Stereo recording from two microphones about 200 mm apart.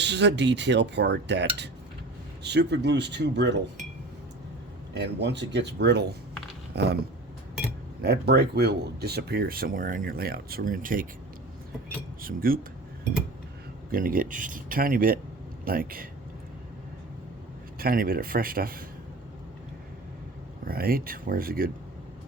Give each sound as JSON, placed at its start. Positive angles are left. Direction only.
{"t": 0.0, "sound": "speech", "side_deg": -60}
{"t": 4.9, "sound": "speech", "side_deg": -60}
{"t": 8.0, "sound": "speech", "side_deg": -55}
{"t": 12.2, "sound": "speech", "side_deg": -45}
{"t": 13.9, "sound": "speech", "side_deg": -45}
{"t": 17.7, "sound": "speech", "side_deg": -45}
{"t": 20.7, "sound": "speech", "side_deg": -50}